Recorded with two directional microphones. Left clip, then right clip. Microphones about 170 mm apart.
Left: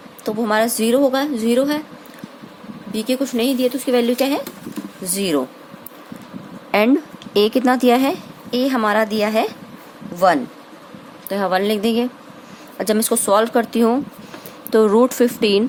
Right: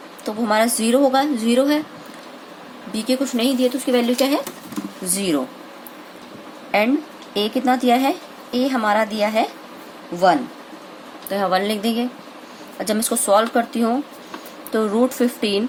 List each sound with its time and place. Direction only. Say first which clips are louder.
0.3 s a woman's voice: left 1 dB; 35° left (ahead or behind)
2.9 s a woman's voice: left 1 dB; 30° left (ahead or behind)
6.7 s a woman's voice: left 2 dB; 50° left (ahead or behind)
11.3 s a woman's voice: left 1 dB; 35° left (ahead or behind)